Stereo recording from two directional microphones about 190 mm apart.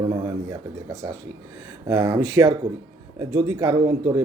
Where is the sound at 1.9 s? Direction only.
15° right (ahead or behind).